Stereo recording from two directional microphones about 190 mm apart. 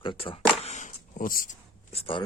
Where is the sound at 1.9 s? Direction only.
30° left (ahead or behind).